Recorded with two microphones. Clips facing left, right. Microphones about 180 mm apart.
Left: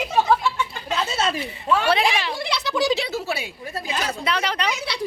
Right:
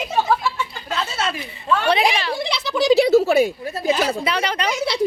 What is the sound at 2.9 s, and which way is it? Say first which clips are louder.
Speech: right 13 dB; 45° right (ahead or behind).